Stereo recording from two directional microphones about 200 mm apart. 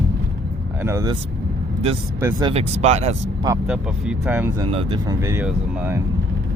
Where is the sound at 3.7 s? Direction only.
5° right (ahead or behind).